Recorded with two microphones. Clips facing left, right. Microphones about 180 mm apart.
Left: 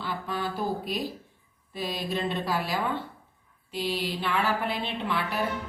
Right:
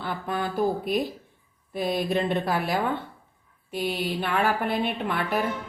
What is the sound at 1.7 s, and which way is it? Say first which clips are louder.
A woman's voice: right 6 dB; 55° right (ahead or behind).